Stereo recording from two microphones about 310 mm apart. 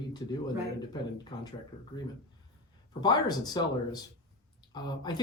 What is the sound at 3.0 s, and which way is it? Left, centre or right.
Speech, centre.